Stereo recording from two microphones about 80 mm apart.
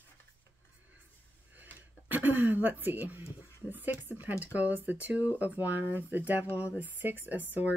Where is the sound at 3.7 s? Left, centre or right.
Right.